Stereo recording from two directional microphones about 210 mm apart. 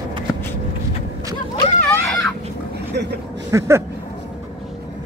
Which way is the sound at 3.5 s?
15° right (ahead or behind).